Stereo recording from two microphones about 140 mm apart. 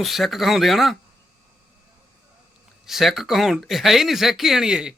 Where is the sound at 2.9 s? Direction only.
Centre (ahead or behind).